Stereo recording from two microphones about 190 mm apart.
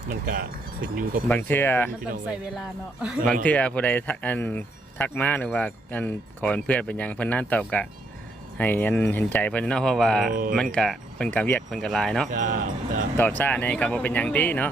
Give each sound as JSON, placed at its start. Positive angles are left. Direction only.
{"t": 0.1, "sound": "speech", "side_deg": -50}
{"t": 1.3, "sound": "speech", "side_deg": 10}
{"t": 3.4, "sound": "speech", "side_deg": 5}
{"t": 12.3, "sound": "speech", "side_deg": -45}
{"t": 13.1, "sound": "speech", "side_deg": 10}